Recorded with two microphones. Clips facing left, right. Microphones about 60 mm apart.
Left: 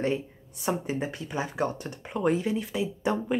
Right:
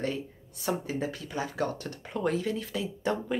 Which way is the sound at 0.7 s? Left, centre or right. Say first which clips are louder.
Left 2 dB; left.